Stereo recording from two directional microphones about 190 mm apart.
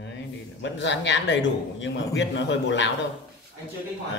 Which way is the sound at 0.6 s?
70° left (ahead or behind).